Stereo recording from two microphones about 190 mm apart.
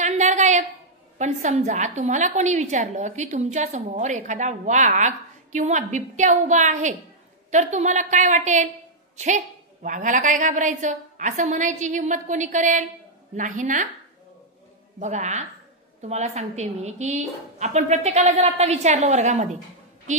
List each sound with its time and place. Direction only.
0.0 s a sound: 40° right (ahead or behind)
1.1 s a woman's voice: 40° right (ahead or behind)
15.0 s a woman's voice: 40° right (ahead or behind)